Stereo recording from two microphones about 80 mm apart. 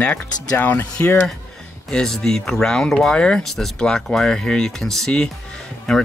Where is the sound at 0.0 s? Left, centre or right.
Centre.